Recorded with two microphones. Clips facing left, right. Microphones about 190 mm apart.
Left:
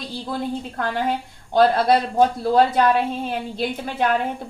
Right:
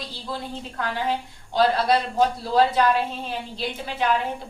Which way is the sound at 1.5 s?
50° left (ahead or behind).